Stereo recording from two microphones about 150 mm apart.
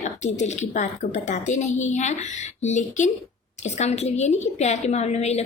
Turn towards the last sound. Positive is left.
turn(degrees=45)  # may be behind; listen again after turning